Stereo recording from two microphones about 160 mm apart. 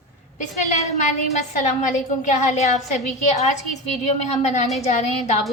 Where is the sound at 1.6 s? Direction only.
50° left (ahead or behind).